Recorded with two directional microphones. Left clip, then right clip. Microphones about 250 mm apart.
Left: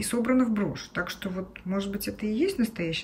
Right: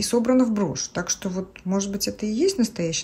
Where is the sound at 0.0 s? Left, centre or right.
Centre.